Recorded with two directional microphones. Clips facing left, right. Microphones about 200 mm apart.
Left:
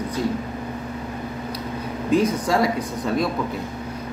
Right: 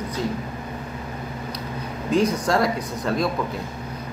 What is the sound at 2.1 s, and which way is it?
Speech, 5° left (ahead or behind).